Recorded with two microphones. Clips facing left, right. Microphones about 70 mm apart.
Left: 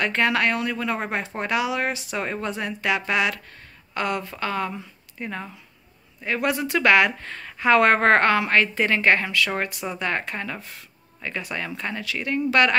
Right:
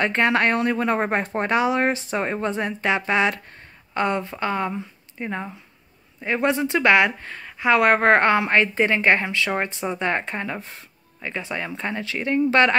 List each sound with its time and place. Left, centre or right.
0.0 s a woman's voice: right